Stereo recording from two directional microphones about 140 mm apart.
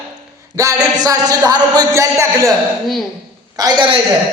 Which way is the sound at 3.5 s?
30° right (ahead or behind).